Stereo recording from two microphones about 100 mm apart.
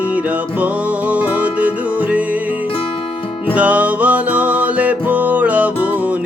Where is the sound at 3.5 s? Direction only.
15° right (ahead or behind).